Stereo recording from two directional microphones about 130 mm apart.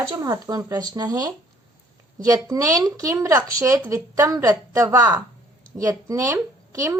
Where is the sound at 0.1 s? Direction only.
30° right (ahead or behind).